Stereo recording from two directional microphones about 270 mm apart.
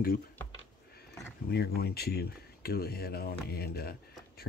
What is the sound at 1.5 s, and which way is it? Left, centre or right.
Speech, left.